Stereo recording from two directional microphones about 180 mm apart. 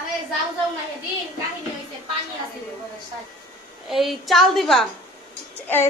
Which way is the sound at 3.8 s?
Centre (ahead or behind).